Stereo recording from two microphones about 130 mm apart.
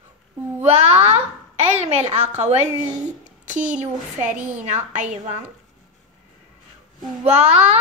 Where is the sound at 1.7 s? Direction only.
55° right (ahead or behind).